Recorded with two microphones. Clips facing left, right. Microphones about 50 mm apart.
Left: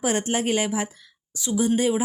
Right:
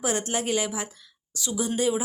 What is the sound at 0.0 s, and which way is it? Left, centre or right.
Speech, left.